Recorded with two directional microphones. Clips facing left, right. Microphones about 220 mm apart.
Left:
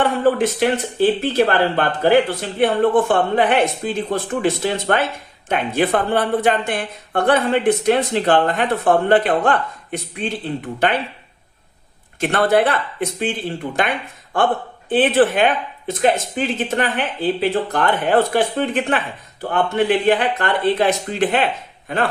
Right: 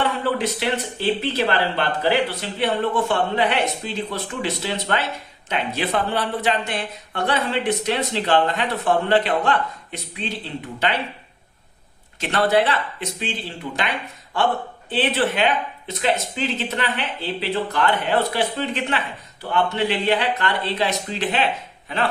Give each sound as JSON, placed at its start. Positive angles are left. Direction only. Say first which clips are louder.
{"t": 0.0, "sound": "speech", "louder": "left 6 dB", "side_deg": 50}
{"t": 12.2, "sound": "speech", "louder": "left 3 dB", "side_deg": 50}
{"t": 14.3, "sound": "a man's voice", "louder": "left 3 dB", "side_deg": 50}